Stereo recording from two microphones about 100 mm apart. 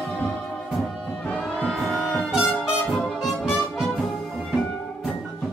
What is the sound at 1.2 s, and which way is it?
Music, 10° left (ahead or behind).